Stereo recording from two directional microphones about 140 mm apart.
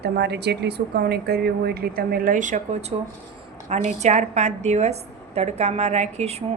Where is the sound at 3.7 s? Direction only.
55° right (ahead or behind).